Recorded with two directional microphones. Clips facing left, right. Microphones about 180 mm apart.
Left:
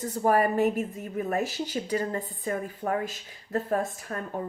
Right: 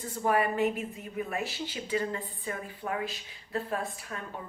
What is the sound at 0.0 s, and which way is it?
Speech, 40° left (ahead or behind).